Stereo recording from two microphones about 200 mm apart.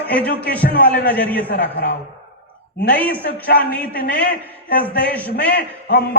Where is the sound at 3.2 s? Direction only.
50° left (ahead or behind).